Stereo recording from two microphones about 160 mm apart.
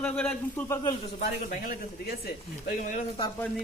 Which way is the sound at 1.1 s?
55° left (ahead or behind).